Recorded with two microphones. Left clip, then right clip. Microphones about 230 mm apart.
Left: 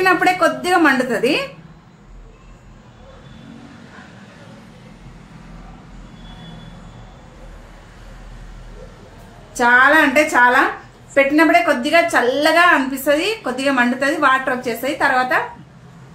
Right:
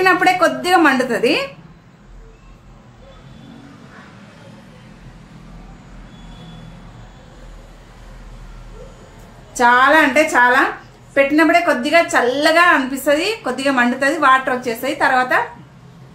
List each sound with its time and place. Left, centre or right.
0.0 s a woman's voice: centre
9.6 s a woman's voice: centre